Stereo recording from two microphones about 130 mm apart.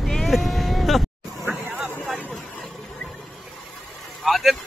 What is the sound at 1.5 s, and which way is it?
Hubbub, 5° right (ahead or behind).